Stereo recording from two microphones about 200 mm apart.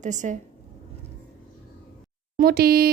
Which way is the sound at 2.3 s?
50° right (ahead or behind).